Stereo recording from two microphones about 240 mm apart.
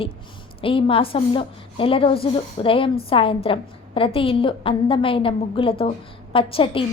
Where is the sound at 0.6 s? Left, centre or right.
Left.